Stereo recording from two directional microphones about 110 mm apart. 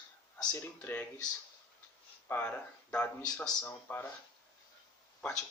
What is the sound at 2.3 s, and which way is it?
Speech, 15° left (ahead or behind).